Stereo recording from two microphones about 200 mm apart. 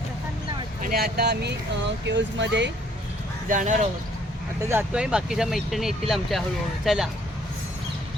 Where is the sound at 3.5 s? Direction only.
40° right (ahead or behind).